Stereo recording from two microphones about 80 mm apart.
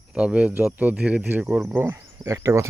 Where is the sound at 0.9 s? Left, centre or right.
Centre.